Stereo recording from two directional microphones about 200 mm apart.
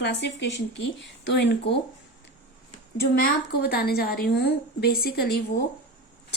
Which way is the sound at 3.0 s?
55° left (ahead or behind).